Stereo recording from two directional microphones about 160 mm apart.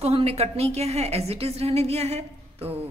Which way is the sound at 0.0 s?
40° right (ahead or behind).